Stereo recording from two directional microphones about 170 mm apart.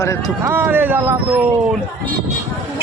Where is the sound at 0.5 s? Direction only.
10° right (ahead or behind).